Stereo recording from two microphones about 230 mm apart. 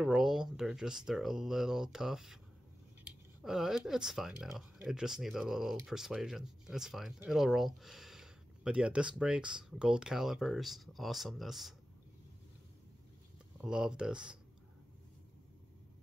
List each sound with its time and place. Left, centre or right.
0.0 s speech: centre
13.6 s speech: centre